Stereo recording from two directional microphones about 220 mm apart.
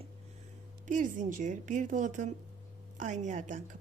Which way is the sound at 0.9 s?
35° right (ahead or behind).